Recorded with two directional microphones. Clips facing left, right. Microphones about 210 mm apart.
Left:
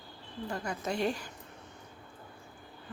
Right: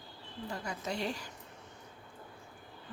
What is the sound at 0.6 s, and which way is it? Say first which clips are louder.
Speech: left 5 dB; 50° left (ahead or behind).